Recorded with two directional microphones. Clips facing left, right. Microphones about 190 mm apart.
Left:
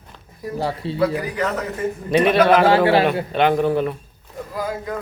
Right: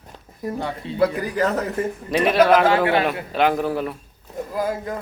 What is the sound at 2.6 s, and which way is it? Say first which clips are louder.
Speech: left 3 dB; 30° left (ahead or behind).